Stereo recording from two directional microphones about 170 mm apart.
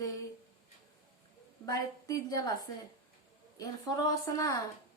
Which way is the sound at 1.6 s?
20° left (ahead or behind).